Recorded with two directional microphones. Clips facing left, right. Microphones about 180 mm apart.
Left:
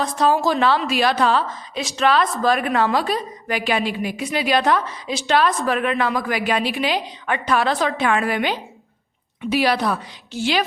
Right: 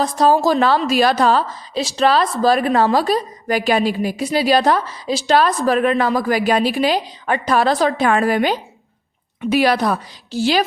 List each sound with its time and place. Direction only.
0.0 s a woman's voice: 40° right (ahead or behind)